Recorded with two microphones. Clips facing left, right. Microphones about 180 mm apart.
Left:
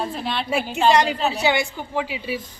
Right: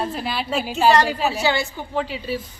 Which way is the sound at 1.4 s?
15° left (ahead or behind).